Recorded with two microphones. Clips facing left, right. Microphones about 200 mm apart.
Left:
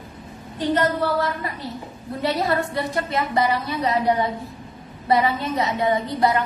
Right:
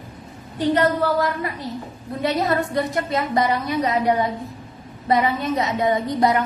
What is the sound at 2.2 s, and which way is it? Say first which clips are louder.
A woman's voice: right 1 dB; 15° right (ahead or behind).